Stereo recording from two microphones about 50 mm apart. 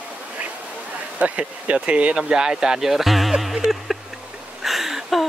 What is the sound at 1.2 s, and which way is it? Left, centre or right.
Speech, right.